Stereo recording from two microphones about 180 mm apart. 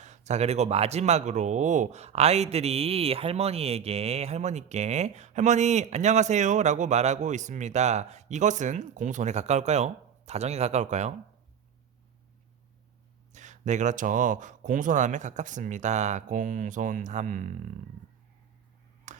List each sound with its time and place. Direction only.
0.0 s speech: 40° right (ahead or behind)
13.3 s speech: 40° right (ahead or behind)
19.1 s tick-tock: 45° right (ahead or behind)